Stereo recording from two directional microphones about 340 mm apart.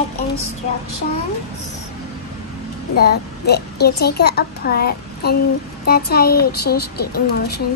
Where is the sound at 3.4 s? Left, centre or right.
Left.